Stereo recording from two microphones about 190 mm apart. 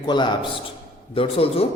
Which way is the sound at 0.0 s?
25° left (ahead or behind).